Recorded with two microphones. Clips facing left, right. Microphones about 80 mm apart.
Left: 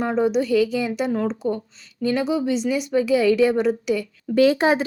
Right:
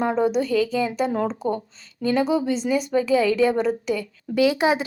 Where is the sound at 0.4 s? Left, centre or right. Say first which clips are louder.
Left 2 dB; right.